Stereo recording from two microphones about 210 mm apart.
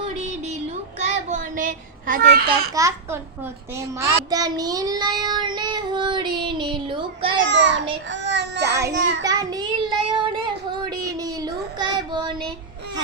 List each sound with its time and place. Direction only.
0.2 s music: 30° right (ahead or behind)
0.9 s child singing: 35° right (ahead or behind)
2.5 s a child's voice: 15° right (ahead or behind)
3.8 s child singing: 15° right (ahead or behind)
7.4 s a child's voice: 60° right (ahead or behind)
8.1 s child singing: 55° right (ahead or behind)
8.6 s child singing: 15° right (ahead or behind)